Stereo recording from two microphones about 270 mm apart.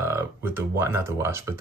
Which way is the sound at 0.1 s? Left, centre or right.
Centre.